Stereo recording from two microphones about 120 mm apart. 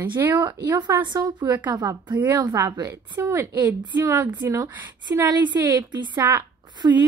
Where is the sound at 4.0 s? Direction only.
25° right (ahead or behind).